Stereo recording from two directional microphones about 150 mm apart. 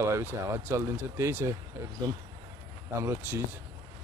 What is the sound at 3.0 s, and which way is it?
Speech, 15° right (ahead or behind).